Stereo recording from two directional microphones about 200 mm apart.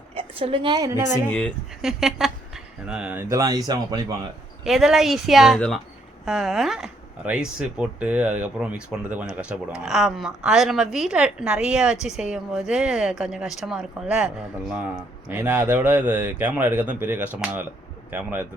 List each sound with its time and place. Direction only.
0.1 s a woman's voice: 30° right (ahead or behind)
1.3 s speech: 5° left (ahead or behind); by 4.0 s 20° right (ahead or behind)
4.6 s speech: centre (ahead or behind)